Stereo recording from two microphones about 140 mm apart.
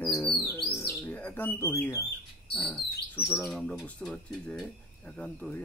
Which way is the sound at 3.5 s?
5° left (ahead or behind).